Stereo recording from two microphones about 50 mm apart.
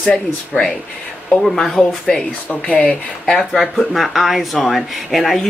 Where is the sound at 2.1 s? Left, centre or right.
Centre.